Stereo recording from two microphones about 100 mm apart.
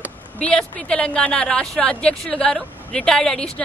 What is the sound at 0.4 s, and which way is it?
Speech, 10° left (ahead or behind).